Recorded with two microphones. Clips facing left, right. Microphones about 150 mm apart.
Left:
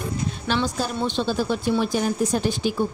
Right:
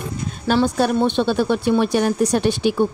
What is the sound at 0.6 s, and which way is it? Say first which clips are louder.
A woman's voice: right 10 dB; 55° right (ahead or behind).